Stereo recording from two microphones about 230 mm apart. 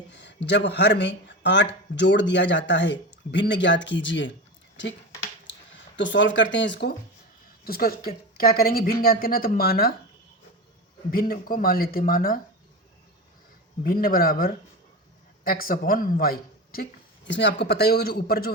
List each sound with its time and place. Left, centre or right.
0.1 s a sound: left
0.4 s speech: left
6.0 s speech: left
11.1 s speech: left
13.8 s speech: left